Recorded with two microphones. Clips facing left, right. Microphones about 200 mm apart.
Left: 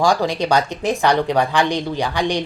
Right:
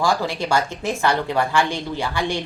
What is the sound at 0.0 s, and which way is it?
Speech, 15° left (ahead or behind).